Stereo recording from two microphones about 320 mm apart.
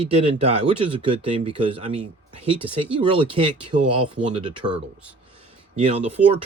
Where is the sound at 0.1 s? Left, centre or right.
Centre.